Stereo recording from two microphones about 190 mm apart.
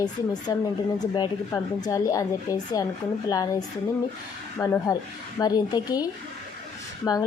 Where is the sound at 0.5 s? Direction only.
20° left (ahead or behind).